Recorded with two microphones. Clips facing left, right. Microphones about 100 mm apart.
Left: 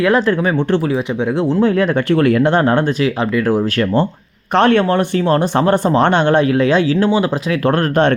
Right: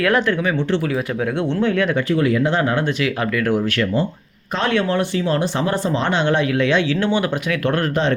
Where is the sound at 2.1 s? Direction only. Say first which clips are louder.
Left 6 dB; 60° left (ahead or behind).